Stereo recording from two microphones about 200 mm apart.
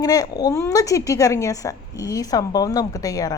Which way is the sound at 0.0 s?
20° left (ahead or behind).